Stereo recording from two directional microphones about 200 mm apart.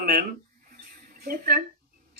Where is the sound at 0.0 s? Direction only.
45° right (ahead or behind).